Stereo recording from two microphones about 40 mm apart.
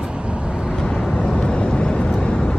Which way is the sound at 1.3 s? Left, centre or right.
Left.